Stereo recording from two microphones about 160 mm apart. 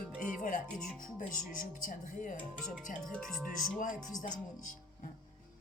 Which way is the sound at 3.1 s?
5° left (ahead or behind).